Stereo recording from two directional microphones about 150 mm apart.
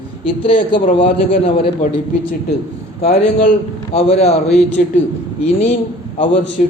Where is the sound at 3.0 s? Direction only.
45° left (ahead or behind).